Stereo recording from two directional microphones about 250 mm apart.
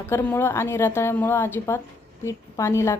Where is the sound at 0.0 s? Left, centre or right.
Centre.